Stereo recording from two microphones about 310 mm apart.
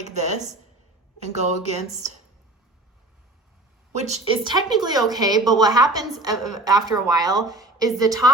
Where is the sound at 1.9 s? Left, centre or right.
Right.